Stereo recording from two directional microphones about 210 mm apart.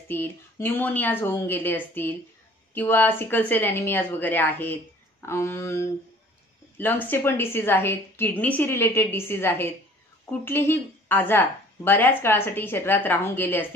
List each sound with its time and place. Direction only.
0.1 s a woman's voice: 10° left (ahead or behind)